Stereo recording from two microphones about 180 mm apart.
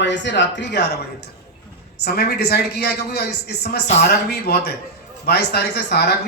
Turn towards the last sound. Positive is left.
turn(degrees=65)  # may be behind; listen again after turning